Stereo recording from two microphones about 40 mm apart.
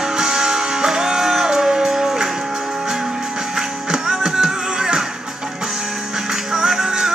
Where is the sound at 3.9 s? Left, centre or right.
Centre.